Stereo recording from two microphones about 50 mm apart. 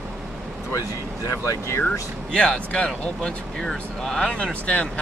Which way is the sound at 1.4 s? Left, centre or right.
Left.